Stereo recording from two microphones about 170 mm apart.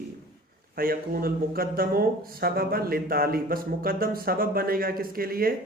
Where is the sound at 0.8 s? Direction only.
60° right (ahead or behind).